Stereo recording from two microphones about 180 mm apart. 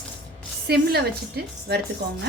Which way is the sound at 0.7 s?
60° right (ahead or behind).